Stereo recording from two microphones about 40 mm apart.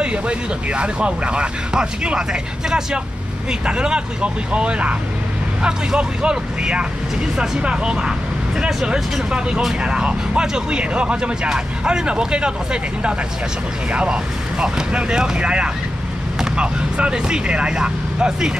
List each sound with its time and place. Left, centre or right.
0.0 s speech: right
3.6 s speech: right
9.8 s speech: right